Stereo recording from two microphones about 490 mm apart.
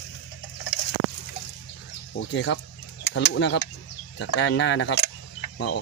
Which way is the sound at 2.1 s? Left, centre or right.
Left.